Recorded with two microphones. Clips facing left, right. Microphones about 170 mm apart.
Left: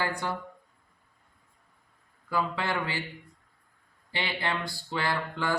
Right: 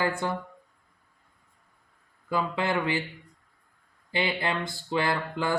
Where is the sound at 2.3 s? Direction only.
20° right (ahead or behind).